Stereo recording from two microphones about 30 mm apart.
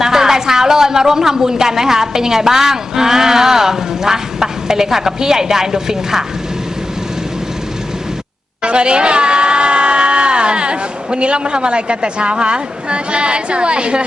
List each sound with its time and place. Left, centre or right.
0.0 s a woman's voice: centre
8.6 s speech: right